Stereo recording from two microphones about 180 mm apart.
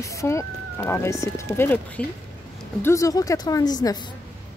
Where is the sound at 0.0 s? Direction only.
15° left (ahead or behind).